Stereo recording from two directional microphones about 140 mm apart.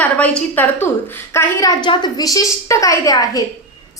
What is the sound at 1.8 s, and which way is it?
A woman's voice, 30° left (ahead or behind).